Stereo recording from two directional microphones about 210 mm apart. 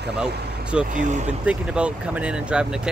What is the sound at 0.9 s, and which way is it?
Speech, 35° right (ahead or behind).